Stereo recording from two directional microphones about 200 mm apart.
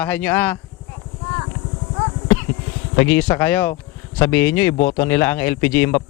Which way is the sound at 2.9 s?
10° left (ahead or behind).